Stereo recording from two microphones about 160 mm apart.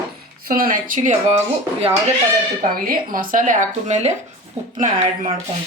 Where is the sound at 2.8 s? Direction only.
60° right (ahead or behind).